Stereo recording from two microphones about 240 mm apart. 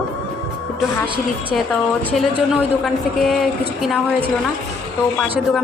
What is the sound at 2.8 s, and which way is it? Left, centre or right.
A woman's voice, centre.